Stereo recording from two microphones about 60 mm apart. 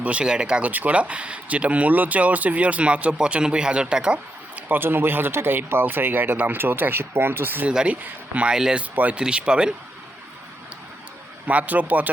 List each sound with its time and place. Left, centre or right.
0.0 s speech: right
4.7 s speech: right
7.7 s speech: centre
8.5 s speech: centre
11.4 s speech: right